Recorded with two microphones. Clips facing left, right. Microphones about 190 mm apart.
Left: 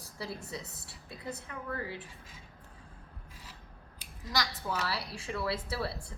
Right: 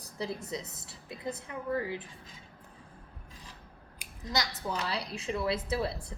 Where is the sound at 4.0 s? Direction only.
20° right (ahead or behind).